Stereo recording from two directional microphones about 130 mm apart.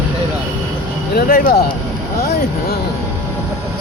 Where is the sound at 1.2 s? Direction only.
90° left.